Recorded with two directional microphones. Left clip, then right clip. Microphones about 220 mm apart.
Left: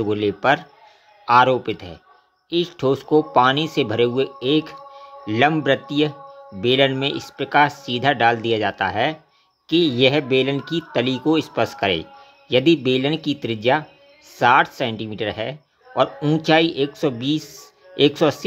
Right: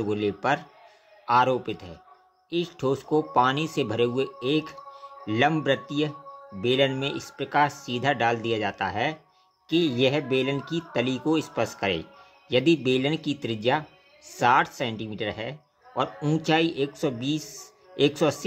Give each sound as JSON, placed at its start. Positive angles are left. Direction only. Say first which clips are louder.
{"t": 0.0, "sound": "speech", "louder": "left 7 dB", "side_deg": 15}